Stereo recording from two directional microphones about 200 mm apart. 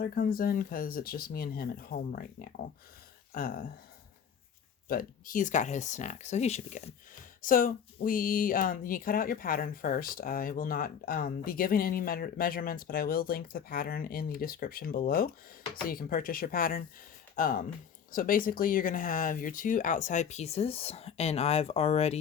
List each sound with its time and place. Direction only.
0.0 s speech: 45° left (ahead or behind)
4.9 s speech: 45° left (ahead or behind)